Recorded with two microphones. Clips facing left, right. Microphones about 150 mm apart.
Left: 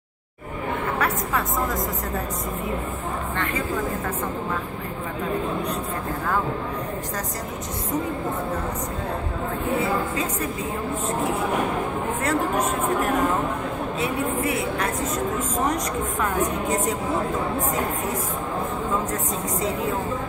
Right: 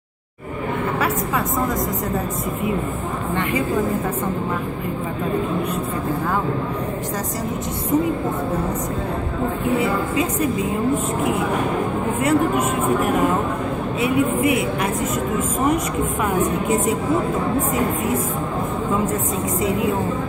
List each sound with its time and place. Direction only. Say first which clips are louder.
0.9 s a woman's voice: right 2 dB; centre (ahead or behind)
12.2 s speech: right 5 dB; 10° right (ahead or behind)